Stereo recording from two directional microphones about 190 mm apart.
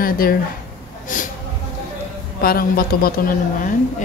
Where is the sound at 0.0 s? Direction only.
50° left (ahead or behind).